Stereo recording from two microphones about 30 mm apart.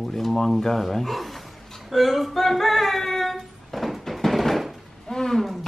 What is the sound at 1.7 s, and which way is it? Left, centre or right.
Female singing, centre.